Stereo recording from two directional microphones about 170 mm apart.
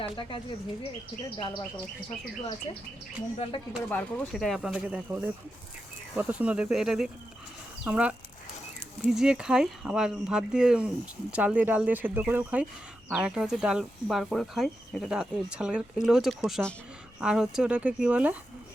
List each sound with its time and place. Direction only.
0.0 s speech: 30° left (ahead or behind)
3.8 s speech: 10° left (ahead or behind); by 18.3 s 10° right (ahead or behind)